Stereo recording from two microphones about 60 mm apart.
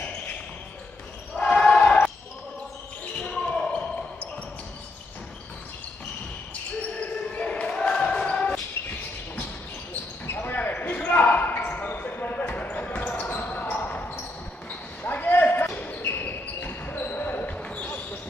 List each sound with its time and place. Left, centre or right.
1.4 s basketball bounce: centre
3.3 s basketball bounce: centre
7.0 s basketball bounce: left
10.2 s basketball bounce: left